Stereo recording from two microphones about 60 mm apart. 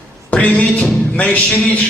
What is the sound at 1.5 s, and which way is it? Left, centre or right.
Speech, left.